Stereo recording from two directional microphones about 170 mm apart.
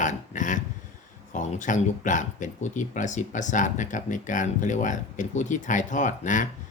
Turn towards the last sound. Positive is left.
turn(degrees=45)  # may be behind; listen again after turning